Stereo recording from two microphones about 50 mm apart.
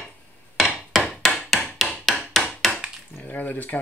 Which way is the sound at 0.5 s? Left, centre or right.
Centre.